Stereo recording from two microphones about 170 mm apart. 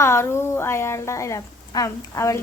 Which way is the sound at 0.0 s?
15° left (ahead or behind).